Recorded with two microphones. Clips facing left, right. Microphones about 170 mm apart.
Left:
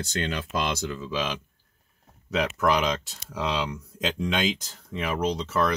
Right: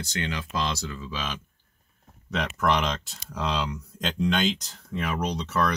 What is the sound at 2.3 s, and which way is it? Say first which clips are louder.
Speech: left 2 dB; 5° left (ahead or behind).